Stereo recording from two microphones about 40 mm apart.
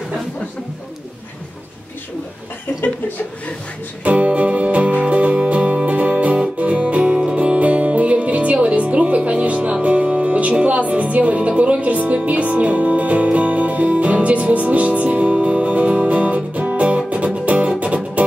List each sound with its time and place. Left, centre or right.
4.0 s music: right